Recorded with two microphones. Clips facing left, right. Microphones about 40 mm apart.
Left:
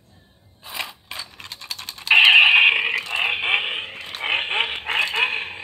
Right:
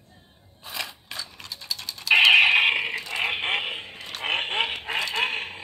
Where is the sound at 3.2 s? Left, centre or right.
Left.